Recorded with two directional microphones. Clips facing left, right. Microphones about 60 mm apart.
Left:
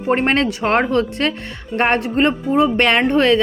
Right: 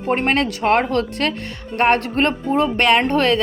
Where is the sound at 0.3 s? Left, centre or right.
Left.